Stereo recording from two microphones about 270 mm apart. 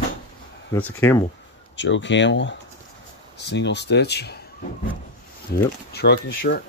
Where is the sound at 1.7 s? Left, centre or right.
Left.